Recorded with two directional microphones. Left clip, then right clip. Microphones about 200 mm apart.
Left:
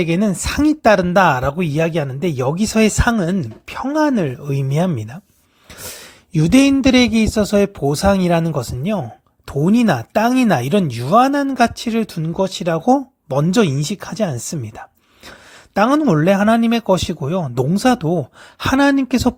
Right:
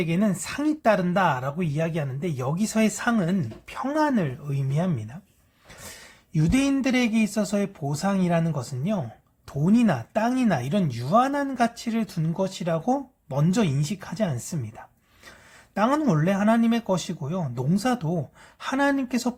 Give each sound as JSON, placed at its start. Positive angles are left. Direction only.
{"t": 0.0, "sound": "speech", "side_deg": 40}
{"t": 6.3, "sound": "speech", "side_deg": 40}